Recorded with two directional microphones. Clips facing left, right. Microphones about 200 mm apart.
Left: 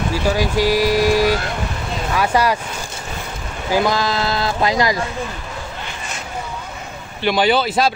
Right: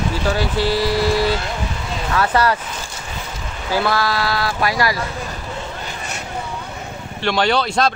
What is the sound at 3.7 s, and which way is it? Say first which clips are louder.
A man's voice: left 2 dB; 15° left (ahead or behind).